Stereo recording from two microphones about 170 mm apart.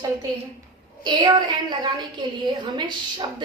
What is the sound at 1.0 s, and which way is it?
A woman's voice, 25° right (ahead or behind).